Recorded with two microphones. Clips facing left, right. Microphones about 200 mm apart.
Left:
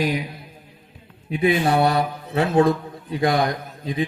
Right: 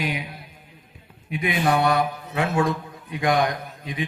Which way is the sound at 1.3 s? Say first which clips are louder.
Left 4 dB; 30° left (ahead or behind).